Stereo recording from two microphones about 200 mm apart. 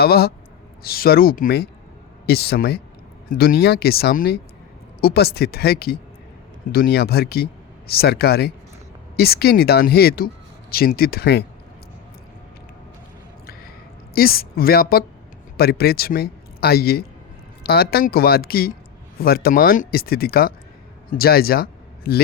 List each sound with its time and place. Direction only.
0.0 s speech: 50° left (ahead or behind)
14.2 s a man's voice: 50° left (ahead or behind)